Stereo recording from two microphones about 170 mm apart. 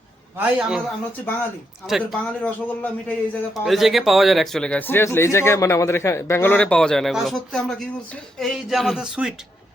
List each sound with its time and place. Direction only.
0.3 s a man's voice: 5° right (ahead or behind)
1.9 s a man's voice: centre (ahead or behind)